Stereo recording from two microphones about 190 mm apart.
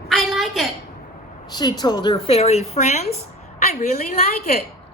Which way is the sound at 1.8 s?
20° left (ahead or behind).